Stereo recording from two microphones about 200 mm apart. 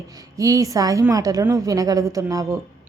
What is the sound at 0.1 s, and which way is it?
A woman's voice, 15° right (ahead or behind).